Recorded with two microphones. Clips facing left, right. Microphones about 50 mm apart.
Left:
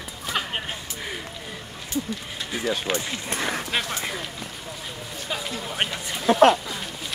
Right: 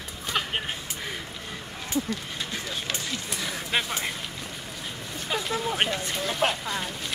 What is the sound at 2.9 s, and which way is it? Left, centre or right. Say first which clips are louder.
Speech: left 5 dB; left.